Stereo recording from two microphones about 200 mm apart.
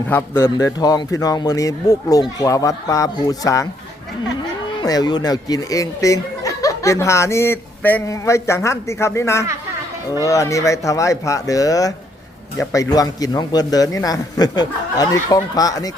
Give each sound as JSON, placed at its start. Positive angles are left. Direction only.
{"t": 0.1, "sound": "speech", "side_deg": 15}
{"t": 4.8, "sound": "a man's voice", "side_deg": 20}